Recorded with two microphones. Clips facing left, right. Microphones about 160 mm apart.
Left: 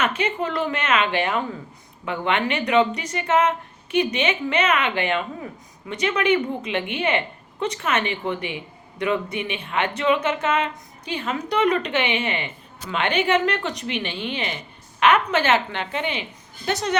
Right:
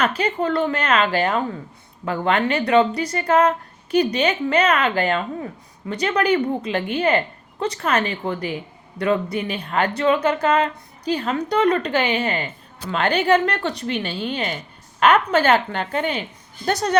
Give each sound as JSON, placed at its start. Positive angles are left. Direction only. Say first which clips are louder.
{"t": 0.0, "sound": "a woman's voice", "louder": "right 3 dB", "side_deg": -35}